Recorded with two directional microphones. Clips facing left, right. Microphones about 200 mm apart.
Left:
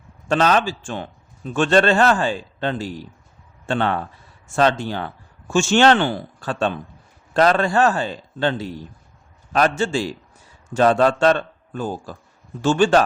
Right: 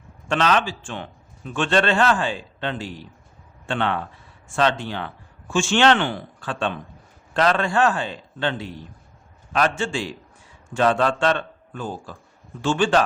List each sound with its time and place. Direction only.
0.3 s a man's voice: 40° left (ahead or behind)